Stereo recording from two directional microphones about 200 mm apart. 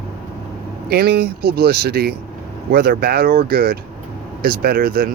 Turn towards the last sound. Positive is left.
turn(degrees=-45)  # may be behind; listen again after turning